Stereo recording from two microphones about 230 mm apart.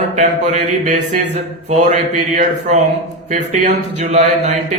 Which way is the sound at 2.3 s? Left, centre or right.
Right.